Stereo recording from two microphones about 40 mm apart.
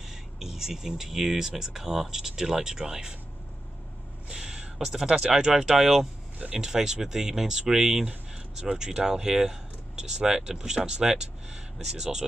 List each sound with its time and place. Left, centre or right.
0.0 s speech: centre
4.3 s a sound: centre
5.1 s speech: centre